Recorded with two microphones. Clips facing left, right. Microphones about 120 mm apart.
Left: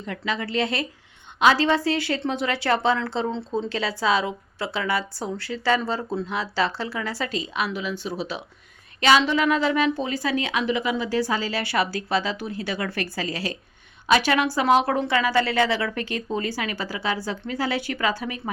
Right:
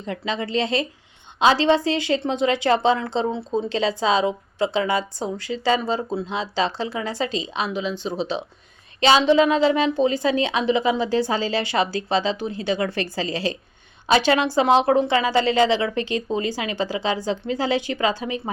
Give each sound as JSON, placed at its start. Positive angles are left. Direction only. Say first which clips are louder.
{"t": 0.0, "sound": "a woman's voice", "louder": "right 2 dB", "side_deg": -25}